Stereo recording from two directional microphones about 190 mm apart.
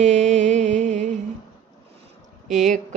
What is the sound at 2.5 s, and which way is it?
Mantra, 40° right (ahead or behind).